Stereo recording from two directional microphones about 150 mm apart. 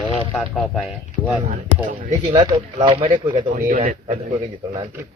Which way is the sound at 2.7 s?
40° right (ahead or behind).